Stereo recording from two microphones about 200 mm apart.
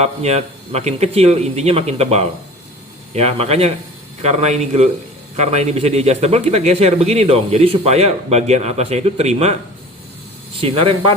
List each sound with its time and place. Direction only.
0.0 s a man's voice: 30° right (ahead or behind)
10.6 s speech: 25° right (ahead or behind)